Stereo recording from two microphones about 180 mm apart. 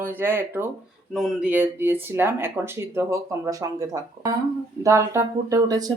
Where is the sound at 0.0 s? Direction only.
10° right (ahead or behind).